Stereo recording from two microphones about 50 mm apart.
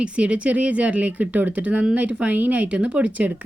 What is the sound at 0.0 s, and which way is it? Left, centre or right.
A woman's voice, right.